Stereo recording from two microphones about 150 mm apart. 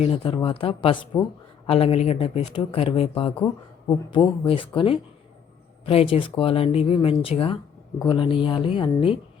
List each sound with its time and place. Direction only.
0.0 s speech: 40° left (ahead or behind)